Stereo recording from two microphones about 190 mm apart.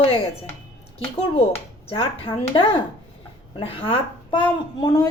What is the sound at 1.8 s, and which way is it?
A woman's voice, 30° left (ahead or behind).